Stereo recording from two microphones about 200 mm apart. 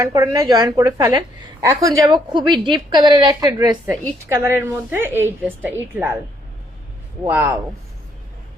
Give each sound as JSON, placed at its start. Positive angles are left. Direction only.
{"t": 0.0, "sound": "a woman's voice", "side_deg": -15}
{"t": 7.3, "sound": "a woman's voice", "side_deg": -10}